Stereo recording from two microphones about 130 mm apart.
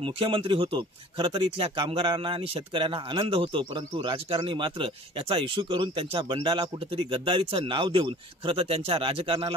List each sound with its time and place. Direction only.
0.0 s speech: 40° right (ahead or behind)